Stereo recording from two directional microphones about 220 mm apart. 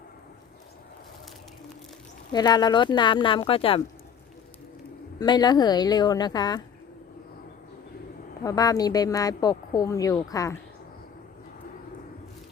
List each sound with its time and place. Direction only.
2.3 s speech: 20° left (ahead or behind)
5.2 s speech: 20° left (ahead or behind)
8.4 s speech: 15° left (ahead or behind)